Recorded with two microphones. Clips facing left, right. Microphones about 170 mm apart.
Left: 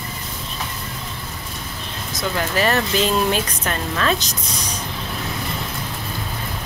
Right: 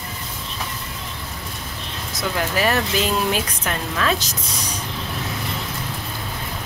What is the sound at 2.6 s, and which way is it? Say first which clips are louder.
Speech: left 2 dB; 10° right (ahead or behind).